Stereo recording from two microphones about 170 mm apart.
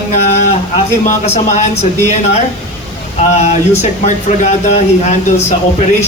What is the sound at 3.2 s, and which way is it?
A man's voice, 40° left (ahead or behind).